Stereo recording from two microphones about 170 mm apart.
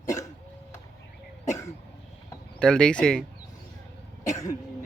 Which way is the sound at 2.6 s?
5° left (ahead or behind).